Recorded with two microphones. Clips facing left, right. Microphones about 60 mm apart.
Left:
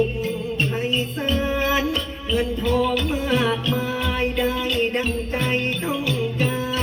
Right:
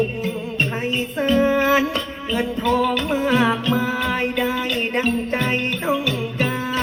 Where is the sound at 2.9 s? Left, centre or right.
Right.